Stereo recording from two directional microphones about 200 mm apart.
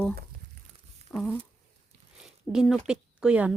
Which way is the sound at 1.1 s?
Centre (ahead or behind).